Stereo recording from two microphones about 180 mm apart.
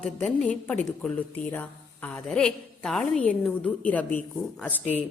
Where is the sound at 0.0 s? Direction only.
10° left (ahead or behind).